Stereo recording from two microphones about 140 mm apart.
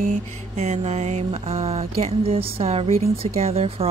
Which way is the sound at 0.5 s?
50° right (ahead or behind).